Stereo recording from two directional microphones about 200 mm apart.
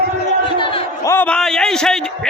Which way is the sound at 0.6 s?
25° left (ahead or behind).